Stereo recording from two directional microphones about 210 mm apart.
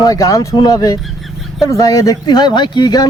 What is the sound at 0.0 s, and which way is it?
Speech, 15° left (ahead or behind).